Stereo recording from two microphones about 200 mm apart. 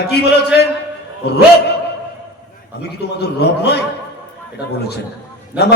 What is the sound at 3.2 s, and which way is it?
Speech, 55° left (ahead or behind).